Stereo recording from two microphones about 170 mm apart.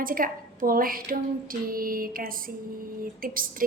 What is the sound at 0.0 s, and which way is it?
A woman's voice, 55° right (ahead or behind).